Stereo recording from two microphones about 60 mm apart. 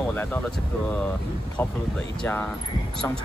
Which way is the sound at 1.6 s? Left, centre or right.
Left.